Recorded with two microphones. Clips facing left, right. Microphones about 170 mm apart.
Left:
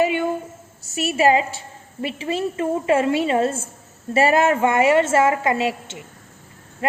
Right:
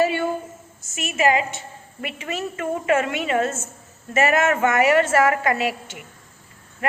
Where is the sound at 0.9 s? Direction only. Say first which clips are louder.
Left 3 dB; 35° left (ahead or behind).